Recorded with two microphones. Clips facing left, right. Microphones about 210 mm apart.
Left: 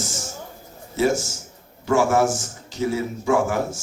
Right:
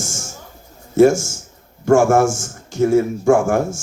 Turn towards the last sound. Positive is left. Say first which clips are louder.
# right 6 dB
turn(degrees=-50)  # may be behind; listen again after turning